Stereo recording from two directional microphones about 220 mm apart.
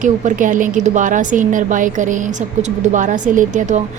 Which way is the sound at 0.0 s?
35° right (ahead or behind).